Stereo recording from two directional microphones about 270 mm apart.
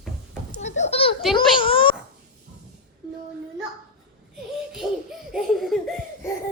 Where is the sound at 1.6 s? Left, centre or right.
Centre.